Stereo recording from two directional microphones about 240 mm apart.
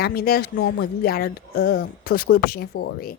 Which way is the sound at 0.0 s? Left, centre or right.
Left.